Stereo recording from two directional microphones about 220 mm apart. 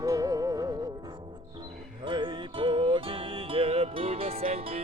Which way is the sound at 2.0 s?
20° right (ahead or behind).